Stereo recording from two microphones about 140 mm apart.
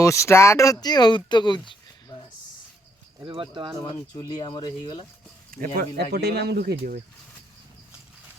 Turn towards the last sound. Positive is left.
turn(degrees=-80)